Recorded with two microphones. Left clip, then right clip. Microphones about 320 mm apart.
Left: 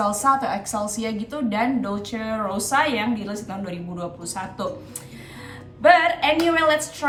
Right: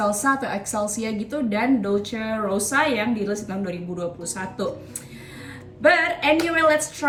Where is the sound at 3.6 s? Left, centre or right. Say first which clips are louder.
Right 3 dB; left.